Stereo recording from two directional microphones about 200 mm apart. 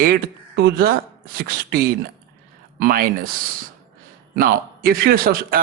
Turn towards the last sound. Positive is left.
turn(degrees=-45)  # may be behind; listen again after turning